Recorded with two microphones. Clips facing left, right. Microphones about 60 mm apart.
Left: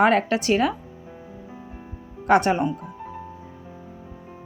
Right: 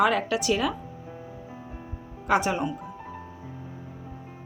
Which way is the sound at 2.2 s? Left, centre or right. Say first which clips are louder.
Left 5 dB; left.